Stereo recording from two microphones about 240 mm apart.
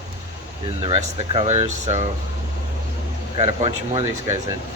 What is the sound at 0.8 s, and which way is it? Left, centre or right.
Speech, right.